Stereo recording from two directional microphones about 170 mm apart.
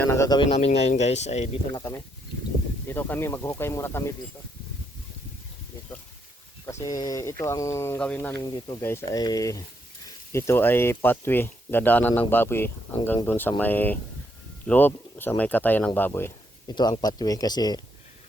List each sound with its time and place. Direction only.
0.0 s speech: 15° left (ahead or behind)
0.5 s speech: 40° left (ahead or behind)
1.7 s speech: 20° left (ahead or behind)
6.8 s speech: 20° left (ahead or behind)
8.4 s speech: 25° left (ahead or behind)
16.6 s speech: 25° left (ahead or behind)